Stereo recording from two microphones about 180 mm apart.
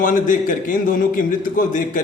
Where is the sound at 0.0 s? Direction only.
45° left (ahead or behind).